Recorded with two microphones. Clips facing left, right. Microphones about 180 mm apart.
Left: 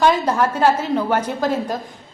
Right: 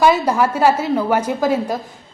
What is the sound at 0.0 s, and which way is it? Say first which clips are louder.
A woman's voice: right 2 dB; 10° right (ahead or behind).